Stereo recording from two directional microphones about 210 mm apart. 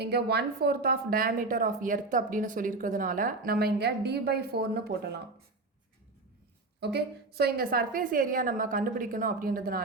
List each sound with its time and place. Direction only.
0.0 s a woman's voice: 50° right (ahead or behind)
6.7 s a woman's voice: 50° right (ahead or behind)